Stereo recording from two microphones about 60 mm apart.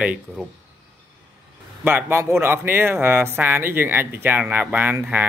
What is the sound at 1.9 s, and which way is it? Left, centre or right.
Speech, right.